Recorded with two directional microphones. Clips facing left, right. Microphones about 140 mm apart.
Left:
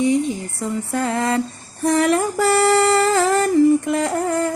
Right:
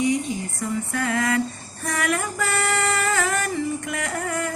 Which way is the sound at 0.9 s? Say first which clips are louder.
Left 4 dB; 25° left (ahead or behind).